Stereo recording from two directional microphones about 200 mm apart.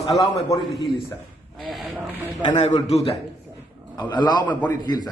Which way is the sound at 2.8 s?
30° left (ahead or behind).